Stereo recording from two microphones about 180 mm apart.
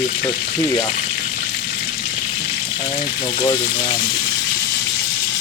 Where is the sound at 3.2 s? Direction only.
25° left (ahead or behind).